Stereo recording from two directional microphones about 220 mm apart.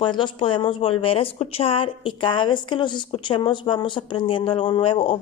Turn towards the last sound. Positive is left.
turn(degrees=20)  # may be behind; listen again after turning